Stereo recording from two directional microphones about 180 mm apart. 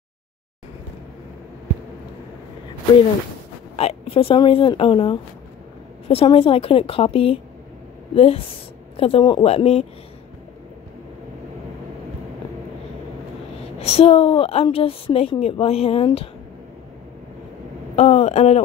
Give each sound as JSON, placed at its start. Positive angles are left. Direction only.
{"t": 3.7, "sound": "a woman's voice", "side_deg": 30}
{"t": 13.7, "sound": "a woman's voice", "side_deg": 35}
{"t": 17.9, "sound": "a woman's voice", "side_deg": 35}